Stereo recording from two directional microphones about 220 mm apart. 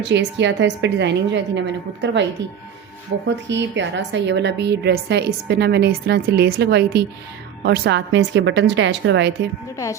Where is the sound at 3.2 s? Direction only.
55° right (ahead or behind).